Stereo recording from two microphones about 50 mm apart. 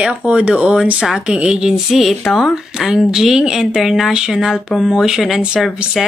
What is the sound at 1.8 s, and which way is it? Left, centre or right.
Speech, centre.